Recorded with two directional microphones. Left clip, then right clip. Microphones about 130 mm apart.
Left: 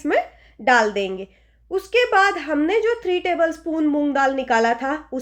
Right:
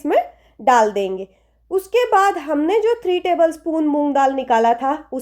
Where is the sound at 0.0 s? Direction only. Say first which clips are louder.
Right 3 dB; 50° right (ahead or behind).